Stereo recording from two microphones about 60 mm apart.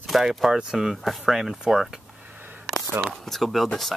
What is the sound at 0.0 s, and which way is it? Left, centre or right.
Speech, centre.